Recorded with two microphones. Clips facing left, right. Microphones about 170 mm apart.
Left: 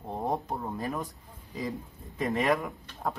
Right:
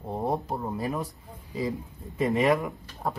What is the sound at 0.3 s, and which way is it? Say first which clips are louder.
Speech: right 2 dB; 5° right (ahead or behind).